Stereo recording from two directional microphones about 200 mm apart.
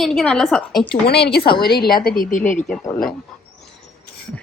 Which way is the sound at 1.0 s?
55° left (ahead or behind).